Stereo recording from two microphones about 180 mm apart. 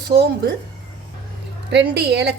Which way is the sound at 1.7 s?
70° right (ahead or behind).